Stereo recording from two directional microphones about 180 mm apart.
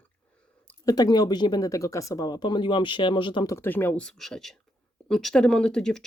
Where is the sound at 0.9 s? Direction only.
20° left (ahead or behind).